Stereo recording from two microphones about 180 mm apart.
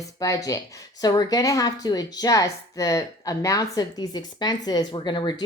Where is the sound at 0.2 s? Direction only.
20° left (ahead or behind).